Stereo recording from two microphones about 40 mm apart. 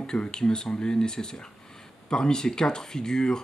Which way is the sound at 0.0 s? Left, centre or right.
Centre.